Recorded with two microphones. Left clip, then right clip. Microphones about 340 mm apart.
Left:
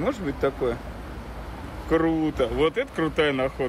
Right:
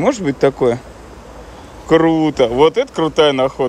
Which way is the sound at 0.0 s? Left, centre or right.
Centre.